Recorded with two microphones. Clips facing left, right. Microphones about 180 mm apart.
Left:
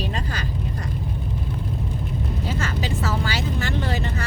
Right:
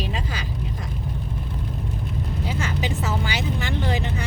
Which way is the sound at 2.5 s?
15° right (ahead or behind).